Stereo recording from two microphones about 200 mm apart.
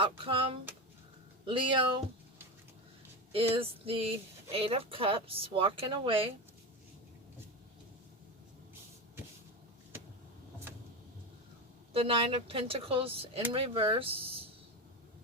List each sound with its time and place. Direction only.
0.0 s speech: 25° right (ahead or behind)
3.3 s speech: 25° right (ahead or behind)
11.9 s speech: 25° right (ahead or behind)